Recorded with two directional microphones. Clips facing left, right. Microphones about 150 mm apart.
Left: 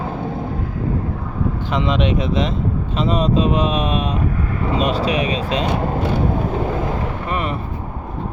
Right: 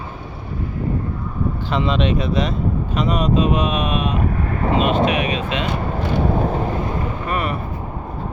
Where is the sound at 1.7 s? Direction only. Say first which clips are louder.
Even; 15° left (ahead or behind); by 5.6 s 35° left (ahead or behind).